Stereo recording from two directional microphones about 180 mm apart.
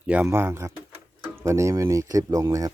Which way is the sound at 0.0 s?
10° right (ahead or behind).